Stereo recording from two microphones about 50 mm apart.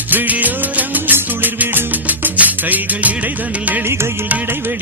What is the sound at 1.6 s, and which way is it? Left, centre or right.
Music, right.